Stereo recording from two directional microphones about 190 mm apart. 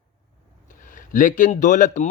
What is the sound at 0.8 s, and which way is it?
A man's voice, 45° left (ahead or behind).